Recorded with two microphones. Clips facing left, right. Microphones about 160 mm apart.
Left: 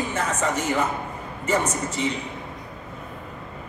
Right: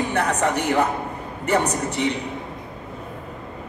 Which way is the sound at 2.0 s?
65° right (ahead or behind).